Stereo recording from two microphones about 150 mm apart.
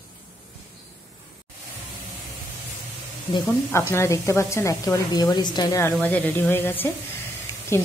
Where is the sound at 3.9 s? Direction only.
20° left (ahead or behind).